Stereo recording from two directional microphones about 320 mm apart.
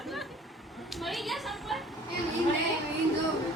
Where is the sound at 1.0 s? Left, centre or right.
Centre.